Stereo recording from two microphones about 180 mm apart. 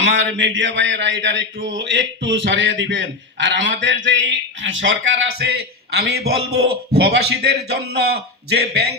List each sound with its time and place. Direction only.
0.0 s speech: 90° right
6.0 s a man's voice: 65° right (ahead or behind)